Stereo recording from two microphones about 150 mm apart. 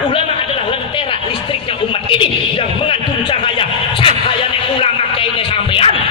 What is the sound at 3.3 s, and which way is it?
Music, 35° left (ahead or behind).